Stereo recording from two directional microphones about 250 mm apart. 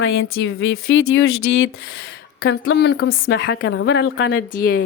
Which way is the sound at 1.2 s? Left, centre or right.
Left.